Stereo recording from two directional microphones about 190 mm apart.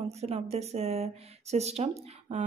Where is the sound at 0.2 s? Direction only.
35° right (ahead or behind).